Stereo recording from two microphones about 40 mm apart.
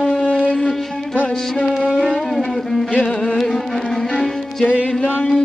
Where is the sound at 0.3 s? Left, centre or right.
Left.